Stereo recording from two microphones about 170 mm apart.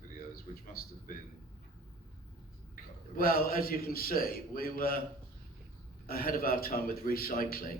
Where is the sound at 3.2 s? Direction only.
60° left (ahead or behind).